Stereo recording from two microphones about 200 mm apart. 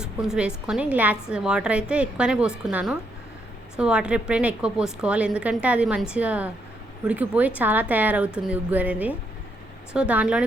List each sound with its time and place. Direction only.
0.0 s a woman's voice: 5° right (ahead or behind)